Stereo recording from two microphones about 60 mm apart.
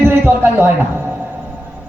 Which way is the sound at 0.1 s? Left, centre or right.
Right.